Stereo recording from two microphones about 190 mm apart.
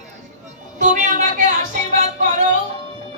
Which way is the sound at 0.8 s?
40° right (ahead or behind).